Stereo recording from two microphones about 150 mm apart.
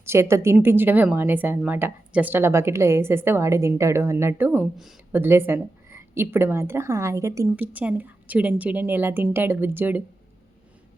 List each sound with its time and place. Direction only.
0.0 s speech: 15° right (ahead or behind)